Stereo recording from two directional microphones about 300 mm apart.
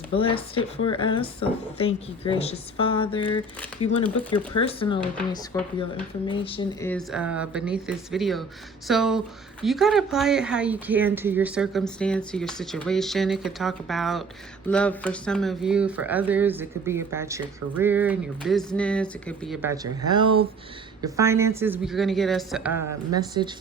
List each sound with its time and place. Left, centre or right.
0.1 s speech: centre
4.3 s speech: centre
19.6 s a woman's voice: centre